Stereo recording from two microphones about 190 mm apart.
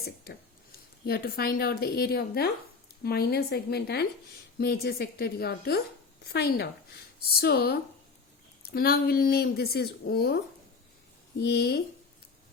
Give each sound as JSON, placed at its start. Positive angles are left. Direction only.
{"t": 1.0, "sound": "a woman's voice", "side_deg": 55}